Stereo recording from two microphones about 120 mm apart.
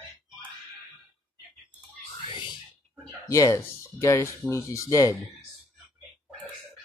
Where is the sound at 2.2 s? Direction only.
40° left (ahead or behind).